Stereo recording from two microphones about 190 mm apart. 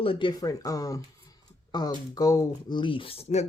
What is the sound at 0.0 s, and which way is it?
Speech, 25° left (ahead or behind).